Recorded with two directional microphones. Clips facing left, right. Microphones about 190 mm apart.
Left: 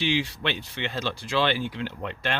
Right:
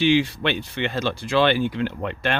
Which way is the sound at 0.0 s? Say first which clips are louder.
Right 7 dB; 55° right (ahead or behind).